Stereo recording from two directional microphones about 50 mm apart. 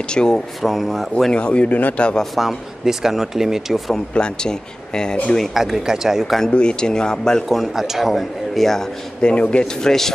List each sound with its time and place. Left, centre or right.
0.1 s speech: centre
0.6 s a man's voice: centre
1.3 s a man's voice: left
2.3 s speech: centre
4.1 s speech: centre
5.5 s speech: centre
6.5 s speech: centre
7.4 s a man's voice: centre
9.2 s a man's voice: left
9.8 s speech: centre